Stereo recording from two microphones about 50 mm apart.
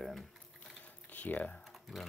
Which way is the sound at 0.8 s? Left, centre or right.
Left.